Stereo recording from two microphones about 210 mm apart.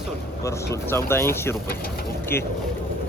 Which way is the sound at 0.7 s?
10° left (ahead or behind).